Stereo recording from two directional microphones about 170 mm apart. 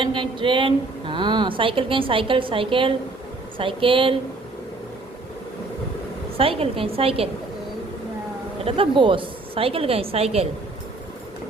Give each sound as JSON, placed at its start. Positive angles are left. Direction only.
{"t": 0.0, "sound": "a woman's voice", "side_deg": -30}
{"t": 6.3, "sound": "a woman's voice", "side_deg": -35}
{"t": 8.6, "sound": "a woman's voice", "side_deg": -30}